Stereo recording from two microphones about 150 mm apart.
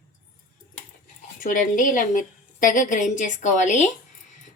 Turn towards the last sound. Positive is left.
turn(degrees=55)  # may be behind; listen again after turning